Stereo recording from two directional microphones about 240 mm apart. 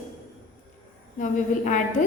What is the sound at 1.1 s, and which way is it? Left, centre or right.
Speech, left.